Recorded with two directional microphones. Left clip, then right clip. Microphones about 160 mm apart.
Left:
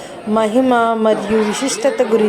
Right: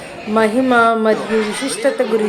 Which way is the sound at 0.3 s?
15° left (ahead or behind).